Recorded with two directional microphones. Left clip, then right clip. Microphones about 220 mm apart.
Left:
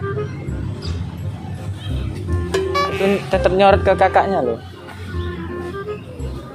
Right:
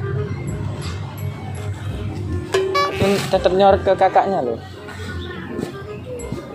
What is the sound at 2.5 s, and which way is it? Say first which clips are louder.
Music: right 1 dB; centre (ahead or behind).